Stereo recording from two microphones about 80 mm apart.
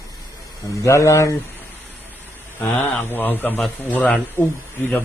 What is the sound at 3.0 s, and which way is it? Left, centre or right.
A man's voice, left.